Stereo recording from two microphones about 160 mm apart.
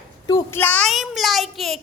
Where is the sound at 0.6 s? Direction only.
10° left (ahead or behind).